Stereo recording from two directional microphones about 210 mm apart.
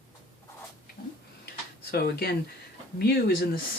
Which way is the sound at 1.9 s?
50° left (ahead or behind).